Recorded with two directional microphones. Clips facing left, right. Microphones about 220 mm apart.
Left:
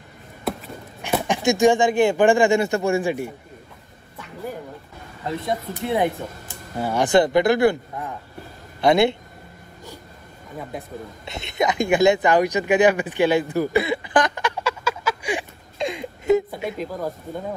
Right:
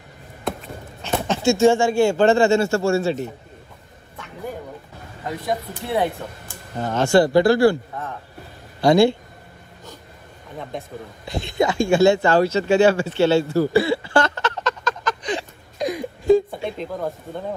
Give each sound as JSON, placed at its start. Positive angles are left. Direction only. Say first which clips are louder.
{"t": 1.0, "sound": "speech", "louder": "right 1 dB", "side_deg": 15}
{"t": 5.9, "sound": "speech", "louder": "left 1 dB", "side_deg": 15}
{"t": 8.8, "sound": "speech", "louder": "right 2 dB", "side_deg": 20}
{"t": 11.2, "sound": "speech", "louder": "right 2 dB", "side_deg": 20}
{"t": 15.8, "sound": "wail", "louder": "right 2 dB", "side_deg": 25}
{"t": 16.7, "sound": "speech", "louder": "right 1 dB", "side_deg": 5}